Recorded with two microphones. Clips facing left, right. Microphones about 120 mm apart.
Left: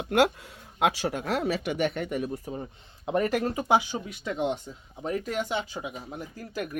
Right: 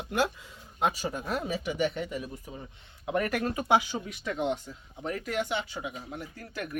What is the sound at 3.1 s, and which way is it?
Speech, 30° left (ahead or behind).